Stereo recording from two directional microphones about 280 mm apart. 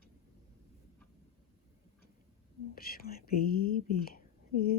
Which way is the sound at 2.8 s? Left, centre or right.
Left.